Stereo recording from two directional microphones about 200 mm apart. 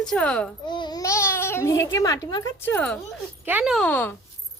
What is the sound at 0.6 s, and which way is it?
A child's voice, 20° left (ahead or behind).